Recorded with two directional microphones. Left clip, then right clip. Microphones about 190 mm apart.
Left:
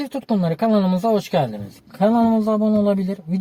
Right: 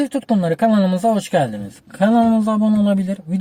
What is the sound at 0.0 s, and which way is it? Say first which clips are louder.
A man's voice: right 4 dB; 20° right (ahead or behind).